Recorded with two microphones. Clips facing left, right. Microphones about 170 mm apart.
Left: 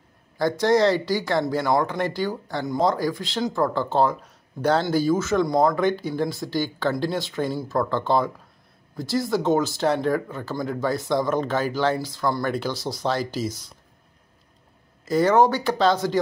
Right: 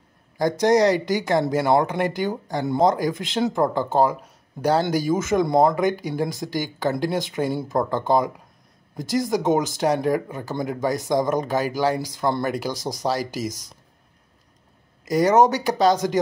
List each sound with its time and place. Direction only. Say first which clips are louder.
0.4 s speech: right 1 dB; 20° right (ahead or behind)
12.4 s speech: even; 10° right (ahead or behind)
15.0 s speech: right 1 dB; 15° right (ahead or behind)